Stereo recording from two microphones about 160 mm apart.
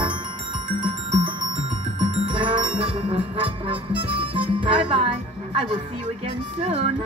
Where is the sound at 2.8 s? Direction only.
30° right (ahead or behind).